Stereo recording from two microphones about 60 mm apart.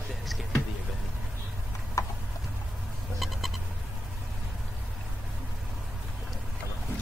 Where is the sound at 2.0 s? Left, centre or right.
Left.